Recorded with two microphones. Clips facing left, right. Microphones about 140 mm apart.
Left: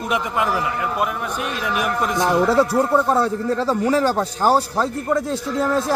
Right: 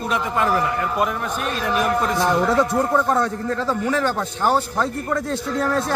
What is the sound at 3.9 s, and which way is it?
Speech, 35° left (ahead or behind).